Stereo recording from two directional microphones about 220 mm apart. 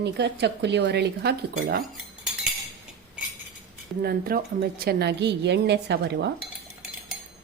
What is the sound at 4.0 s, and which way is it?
A woman's voice, 45° right (ahead or behind).